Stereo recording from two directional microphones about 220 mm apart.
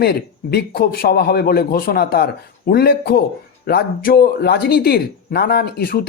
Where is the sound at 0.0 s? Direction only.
45° left (ahead or behind).